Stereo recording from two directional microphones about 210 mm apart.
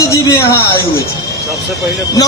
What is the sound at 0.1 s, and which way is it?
Speech, 15° left (ahead or behind).